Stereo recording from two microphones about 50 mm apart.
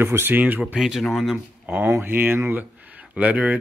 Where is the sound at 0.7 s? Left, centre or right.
Centre.